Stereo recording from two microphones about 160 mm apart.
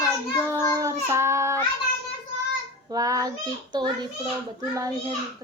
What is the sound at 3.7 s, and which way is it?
Speech, 25° right (ahead or behind).